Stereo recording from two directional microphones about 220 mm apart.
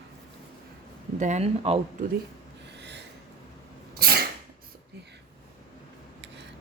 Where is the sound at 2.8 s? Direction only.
50° right (ahead or behind).